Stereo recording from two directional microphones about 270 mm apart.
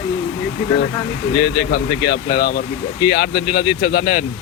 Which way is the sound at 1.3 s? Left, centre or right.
Left.